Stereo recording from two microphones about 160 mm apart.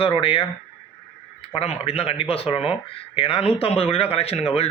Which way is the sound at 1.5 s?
40° left (ahead or behind).